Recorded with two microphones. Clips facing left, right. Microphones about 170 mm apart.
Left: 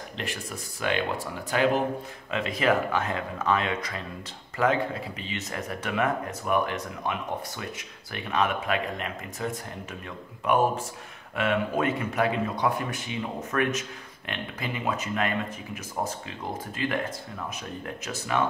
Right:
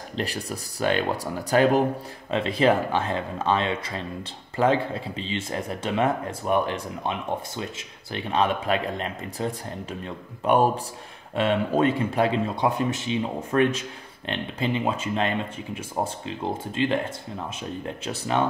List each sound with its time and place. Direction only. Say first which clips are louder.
0.1 s speech: right 7 dB; 35° right (ahead or behind)